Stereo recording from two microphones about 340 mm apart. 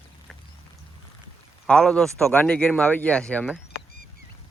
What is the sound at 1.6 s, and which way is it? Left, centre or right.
Speech, centre.